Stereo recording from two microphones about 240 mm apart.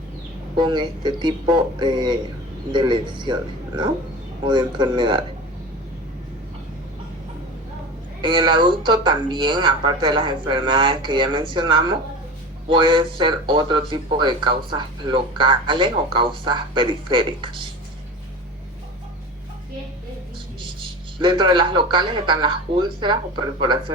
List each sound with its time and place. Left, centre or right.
0.5 s speech: centre
4.4 s speech: centre
8.2 s speech: centre
20.6 s speech: centre